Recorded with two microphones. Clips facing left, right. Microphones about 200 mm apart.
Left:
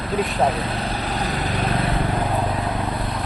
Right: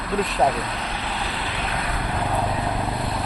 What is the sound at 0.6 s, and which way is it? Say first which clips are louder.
Vehicle: left 3 dB; 35° left (ahead or behind).